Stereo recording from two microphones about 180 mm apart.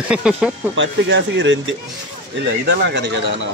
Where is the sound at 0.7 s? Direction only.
90° right.